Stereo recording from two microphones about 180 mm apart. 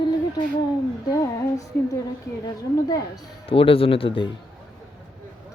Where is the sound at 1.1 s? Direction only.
20° left (ahead or behind).